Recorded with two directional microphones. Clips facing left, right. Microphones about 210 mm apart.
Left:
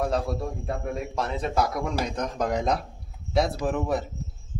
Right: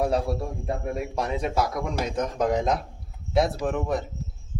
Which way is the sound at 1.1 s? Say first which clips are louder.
Even; 10° right (ahead or behind).